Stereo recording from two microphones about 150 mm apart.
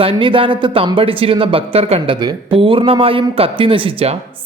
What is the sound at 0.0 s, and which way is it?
Speech, 35° right (ahead or behind).